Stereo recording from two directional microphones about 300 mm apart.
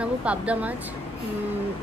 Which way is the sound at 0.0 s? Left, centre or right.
Centre.